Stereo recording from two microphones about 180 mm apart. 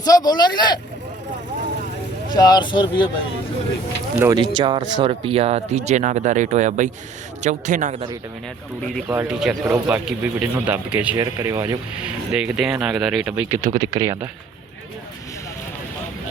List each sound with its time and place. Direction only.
0.0 s speech: 20° left (ahead or behind)
2.3 s speech: 20° left (ahead or behind)
4.2 s speech: 20° right (ahead or behind); by 8.1 s 40° right (ahead or behind)
9.0 s speech: 5° right (ahead or behind)
11.2 s speech: 20° right (ahead or behind)
12.3 s speech: 5° right (ahead or behind)
13.7 s speech: 25° right (ahead or behind)